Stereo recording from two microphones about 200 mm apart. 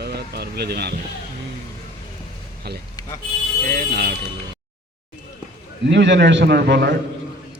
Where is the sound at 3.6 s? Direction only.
50° right (ahead or behind).